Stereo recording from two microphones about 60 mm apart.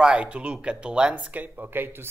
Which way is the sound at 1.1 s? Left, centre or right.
Right.